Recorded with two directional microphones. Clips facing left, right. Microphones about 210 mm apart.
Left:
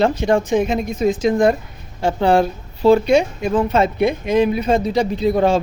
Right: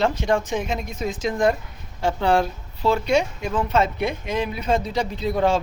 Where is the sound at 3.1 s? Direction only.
10° left (ahead or behind).